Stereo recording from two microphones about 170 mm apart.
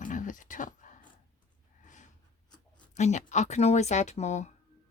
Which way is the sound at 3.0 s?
45° left (ahead or behind).